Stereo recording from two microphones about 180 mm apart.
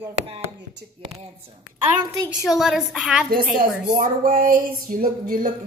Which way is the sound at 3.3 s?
50° right (ahead or behind).